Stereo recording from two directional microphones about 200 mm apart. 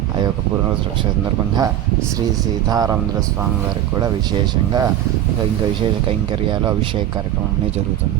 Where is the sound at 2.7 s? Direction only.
20° right (ahead or behind).